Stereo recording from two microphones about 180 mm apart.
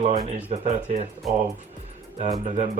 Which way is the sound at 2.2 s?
40° right (ahead or behind).